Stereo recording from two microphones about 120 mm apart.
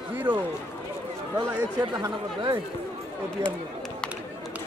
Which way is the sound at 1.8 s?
35° right (ahead or behind).